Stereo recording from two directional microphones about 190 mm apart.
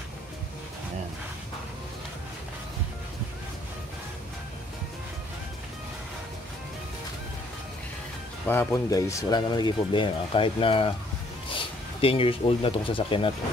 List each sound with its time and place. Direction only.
8.5 s speech: 10° left (ahead or behind); by 13.3 s 25° left (ahead or behind)